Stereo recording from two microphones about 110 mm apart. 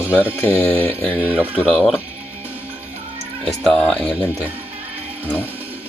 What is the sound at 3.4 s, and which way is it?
Speech, 5° left (ahead or behind).